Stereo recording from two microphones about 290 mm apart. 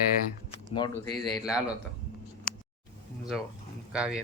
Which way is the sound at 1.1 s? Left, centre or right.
Centre.